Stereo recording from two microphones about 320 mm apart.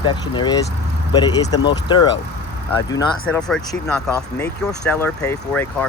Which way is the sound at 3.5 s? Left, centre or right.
Centre.